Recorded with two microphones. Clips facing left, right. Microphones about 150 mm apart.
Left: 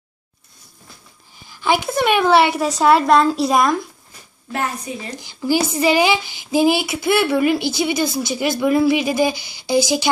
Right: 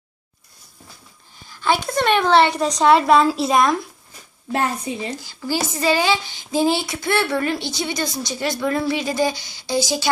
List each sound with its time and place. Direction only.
1.5 s a woman's voice: 10° left (ahead or behind)
4.5 s a woman's voice: 25° right (ahead or behind)
5.1 s speech: 15° left (ahead or behind)